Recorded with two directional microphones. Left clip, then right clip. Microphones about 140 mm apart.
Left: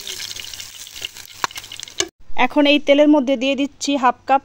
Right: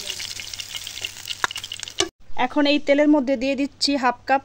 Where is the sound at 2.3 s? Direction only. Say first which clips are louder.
Left 5 dB; 55° left (ahead or behind).